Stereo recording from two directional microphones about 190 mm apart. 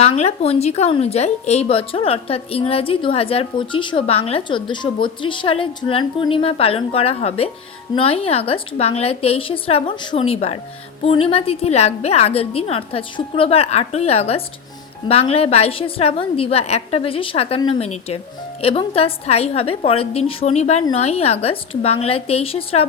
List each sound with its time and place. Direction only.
0.0 s speech: 35° left (ahead or behind)